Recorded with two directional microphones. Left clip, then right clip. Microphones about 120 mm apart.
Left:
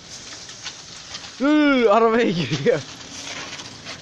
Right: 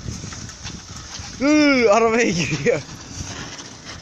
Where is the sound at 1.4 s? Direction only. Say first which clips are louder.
Right 1 dB; 10° left (ahead or behind).